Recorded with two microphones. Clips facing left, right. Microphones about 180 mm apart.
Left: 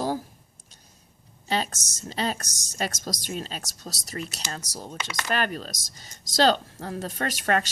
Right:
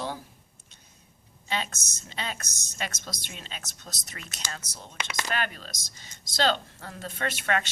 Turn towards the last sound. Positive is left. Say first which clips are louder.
# left 3 dB
turn(degrees=40)  # may be behind; listen again after turning